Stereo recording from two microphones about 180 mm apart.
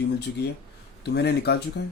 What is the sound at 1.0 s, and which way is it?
Speech, 65° left (ahead or behind).